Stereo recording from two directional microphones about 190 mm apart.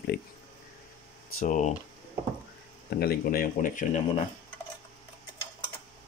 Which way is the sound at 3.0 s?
50° left (ahead or behind).